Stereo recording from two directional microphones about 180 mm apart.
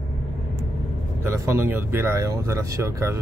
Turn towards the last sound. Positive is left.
turn(degrees=-15)  # may be behind; listen again after turning